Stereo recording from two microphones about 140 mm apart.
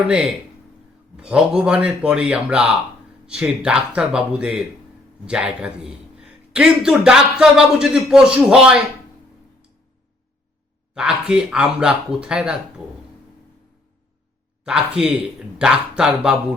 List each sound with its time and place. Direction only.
1.1 s a man's voice: 5° right (ahead or behind)
10.9 s a man's voice: 5° right (ahead or behind)
14.6 s speech: 5° right (ahead or behind)